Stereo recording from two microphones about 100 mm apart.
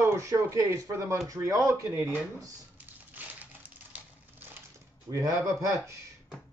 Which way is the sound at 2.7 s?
15° right (ahead or behind).